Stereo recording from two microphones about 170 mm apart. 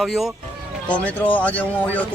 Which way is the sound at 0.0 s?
Centre (ahead or behind).